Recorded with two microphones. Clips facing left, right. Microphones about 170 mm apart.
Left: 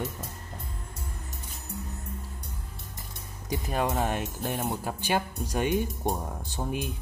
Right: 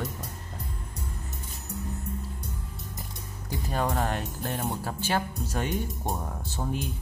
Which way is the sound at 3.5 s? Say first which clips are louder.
Left 1 dB; 10° left (ahead or behind).